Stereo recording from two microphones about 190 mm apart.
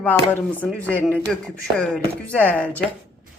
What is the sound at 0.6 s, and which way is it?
Speech, 5° left (ahead or behind).